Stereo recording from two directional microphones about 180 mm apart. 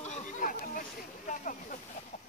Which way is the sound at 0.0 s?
40° left (ahead or behind).